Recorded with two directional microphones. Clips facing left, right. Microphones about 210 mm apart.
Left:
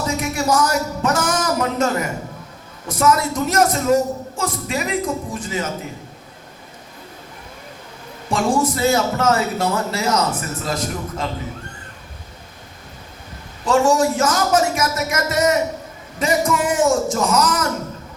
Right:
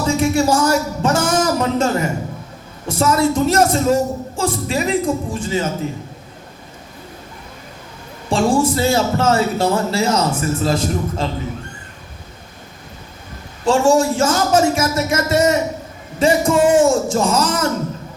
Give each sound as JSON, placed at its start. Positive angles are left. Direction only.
{"t": 0.1, "sound": "a man's voice", "side_deg": -30}
{"t": 8.3, "sound": "a man's voice", "side_deg": -30}
{"t": 13.7, "sound": "a man's voice", "side_deg": -30}